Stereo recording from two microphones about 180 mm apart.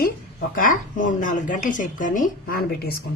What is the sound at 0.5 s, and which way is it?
A woman's voice, 50° left (ahead or behind).